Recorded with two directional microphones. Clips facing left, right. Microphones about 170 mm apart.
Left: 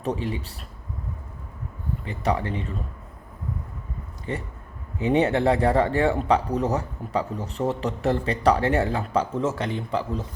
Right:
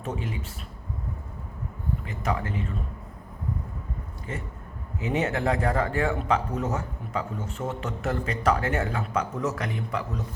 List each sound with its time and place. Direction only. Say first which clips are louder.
0.0 s speech: left 5 dB; 35° left (ahead or behind)
2.0 s speech: left 6 dB; 30° left (ahead or behind)
4.9 s speech: left 6 dB; 35° left (ahead or behind)